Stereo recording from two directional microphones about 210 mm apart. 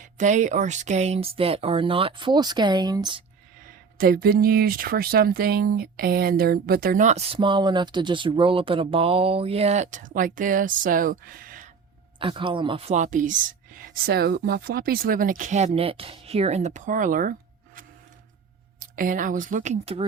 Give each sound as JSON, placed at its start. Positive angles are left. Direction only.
{"t": 0.0, "sound": "speech", "side_deg": -35}
{"t": 3.6, "sound": "speech", "side_deg": -40}
{"t": 12.2, "sound": "speech", "side_deg": -25}
{"t": 18.8, "sound": "speech", "side_deg": -40}